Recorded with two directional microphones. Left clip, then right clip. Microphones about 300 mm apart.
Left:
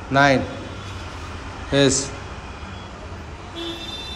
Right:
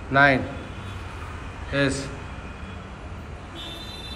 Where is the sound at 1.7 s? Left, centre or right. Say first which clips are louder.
Left 6 dB; centre.